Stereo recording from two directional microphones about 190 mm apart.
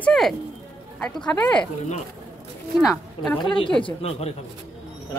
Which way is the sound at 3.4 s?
25° left (ahead or behind).